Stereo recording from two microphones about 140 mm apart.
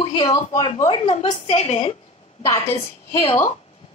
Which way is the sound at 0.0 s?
25° left (ahead or behind).